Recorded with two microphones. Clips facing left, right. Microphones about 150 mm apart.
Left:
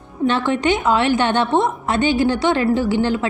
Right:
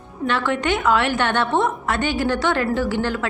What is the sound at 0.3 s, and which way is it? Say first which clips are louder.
A woman's voice: left 3 dB; 25° left (ahead or behind).